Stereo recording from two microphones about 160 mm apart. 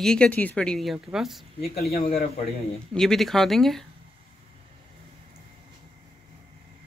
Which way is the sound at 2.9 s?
Centre (ahead or behind).